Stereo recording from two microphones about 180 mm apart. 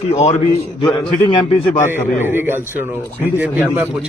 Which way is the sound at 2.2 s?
10° right (ahead or behind).